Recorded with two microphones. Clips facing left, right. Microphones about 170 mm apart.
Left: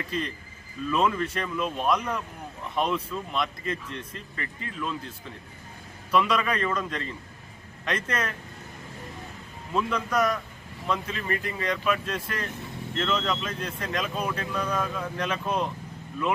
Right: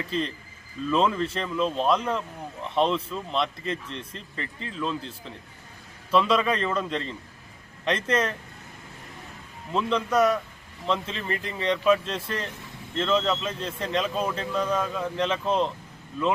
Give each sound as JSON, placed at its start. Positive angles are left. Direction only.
{"t": 0.1, "sound": "speech", "side_deg": -30}
{"t": 9.7, "sound": "speech", "side_deg": -25}